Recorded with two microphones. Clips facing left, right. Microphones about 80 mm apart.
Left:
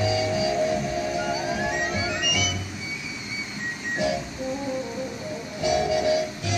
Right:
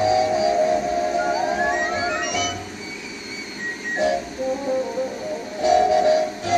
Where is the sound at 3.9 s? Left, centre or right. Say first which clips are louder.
Right 5 dB; right.